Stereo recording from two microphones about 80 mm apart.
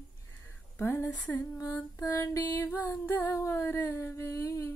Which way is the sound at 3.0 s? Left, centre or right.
Left.